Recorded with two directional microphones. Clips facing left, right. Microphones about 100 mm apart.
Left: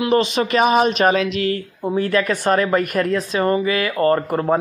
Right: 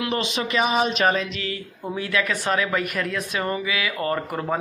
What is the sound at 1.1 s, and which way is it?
Speech, 90° left.